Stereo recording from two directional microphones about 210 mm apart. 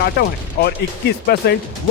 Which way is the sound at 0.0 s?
50° left (ahead or behind).